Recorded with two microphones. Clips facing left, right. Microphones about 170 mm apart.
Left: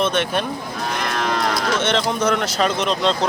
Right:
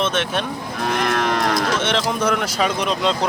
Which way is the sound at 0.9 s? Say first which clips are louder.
Right 3 dB; 55° right (ahead or behind).